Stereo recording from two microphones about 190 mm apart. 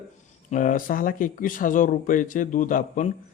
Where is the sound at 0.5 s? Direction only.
45° left (ahead or behind).